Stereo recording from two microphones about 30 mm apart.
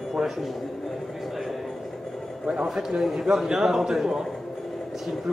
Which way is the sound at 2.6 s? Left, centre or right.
Centre.